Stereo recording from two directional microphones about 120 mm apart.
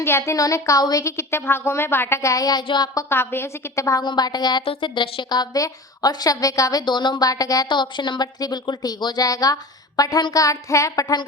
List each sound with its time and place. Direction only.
0.0 s speech: 20° left (ahead or behind)
3.1 s a woman's voice: 20° left (ahead or behind); by 4.6 s 35° left (ahead or behind)
4.6 s a woman's voice: 45° left (ahead or behind)